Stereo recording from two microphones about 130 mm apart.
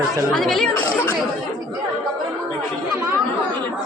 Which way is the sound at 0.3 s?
Centre (ahead or behind).